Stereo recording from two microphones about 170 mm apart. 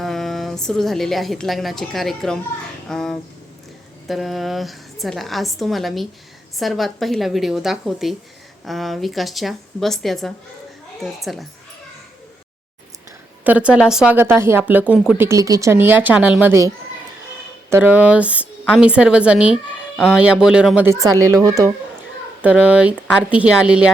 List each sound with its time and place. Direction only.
0.0 s a woman's voice: centre (ahead or behind)
13.4 s speech: 10° right (ahead or behind)
14.8 s a woman's voice: centre (ahead or behind)
15.2 s speech: 20° right (ahead or behind)
22.4 s speech: 10° right (ahead or behind)